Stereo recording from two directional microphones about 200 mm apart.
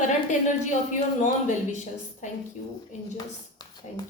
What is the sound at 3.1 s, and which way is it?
Speech, 20° left (ahead or behind).